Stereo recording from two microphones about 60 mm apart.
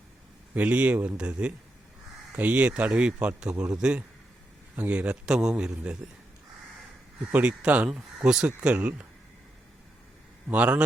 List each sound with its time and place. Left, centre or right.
0.5 s a man's voice: right
4.8 s speech: right
5.2 s a man's voice: centre
7.3 s speech: right
10.5 s speech: right